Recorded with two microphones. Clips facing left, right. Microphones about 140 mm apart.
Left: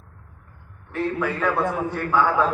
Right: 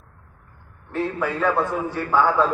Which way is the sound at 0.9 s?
10° right (ahead or behind).